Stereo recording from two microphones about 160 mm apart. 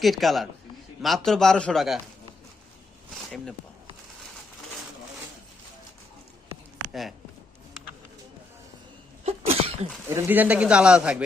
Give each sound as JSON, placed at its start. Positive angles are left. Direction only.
{"t": 0.0, "sound": "a man's voice", "side_deg": 0}
{"t": 9.2, "sound": "cough", "side_deg": -40}
{"t": 10.1, "sound": "speech", "side_deg": -15}